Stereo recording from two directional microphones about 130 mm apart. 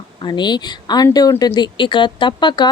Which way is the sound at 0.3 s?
35° left (ahead or behind).